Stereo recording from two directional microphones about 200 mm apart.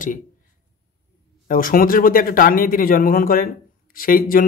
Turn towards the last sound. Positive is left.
turn(degrees=45)  # may be behind; listen again after turning